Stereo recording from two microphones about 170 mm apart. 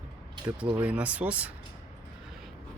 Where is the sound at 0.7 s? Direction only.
10° right (ahead or behind).